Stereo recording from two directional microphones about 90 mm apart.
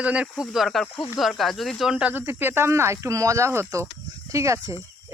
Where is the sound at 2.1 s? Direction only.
25° right (ahead or behind).